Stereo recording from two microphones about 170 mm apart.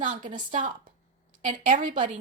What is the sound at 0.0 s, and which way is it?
Speech, 50° right (ahead or behind).